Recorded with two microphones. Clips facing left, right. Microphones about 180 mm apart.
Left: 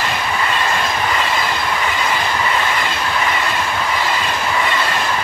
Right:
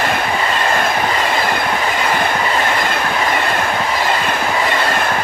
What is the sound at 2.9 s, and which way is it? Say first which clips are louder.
Train: right 2 dB; 55° right (ahead or behind).